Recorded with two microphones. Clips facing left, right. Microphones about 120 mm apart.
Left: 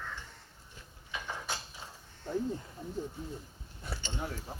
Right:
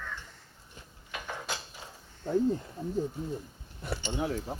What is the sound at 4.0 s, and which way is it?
Speech, 15° right (ahead or behind).